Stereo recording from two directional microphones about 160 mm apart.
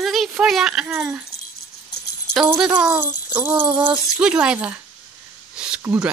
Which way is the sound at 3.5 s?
30° right (ahead or behind).